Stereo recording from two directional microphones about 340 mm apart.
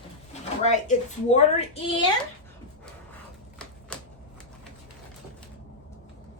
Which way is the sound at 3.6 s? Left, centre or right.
Centre.